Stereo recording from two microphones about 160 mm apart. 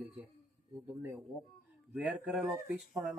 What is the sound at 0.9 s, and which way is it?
Speech, 15° right (ahead or behind).